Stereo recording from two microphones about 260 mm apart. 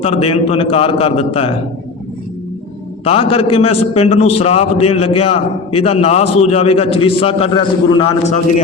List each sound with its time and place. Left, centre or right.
0.0 s a man's voice: left
3.0 s a man's voice: left